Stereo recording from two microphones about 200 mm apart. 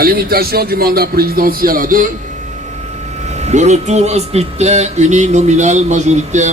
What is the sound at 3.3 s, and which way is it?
Speech, 35° right (ahead or behind).